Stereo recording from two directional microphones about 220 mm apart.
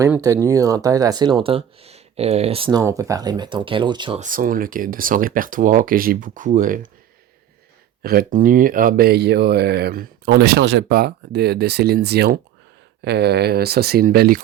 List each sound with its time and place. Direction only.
0.0 s speech: 15° right (ahead or behind)
4.2 s speech: 40° right (ahead or behind)
8.0 s speech: 40° right (ahead or behind)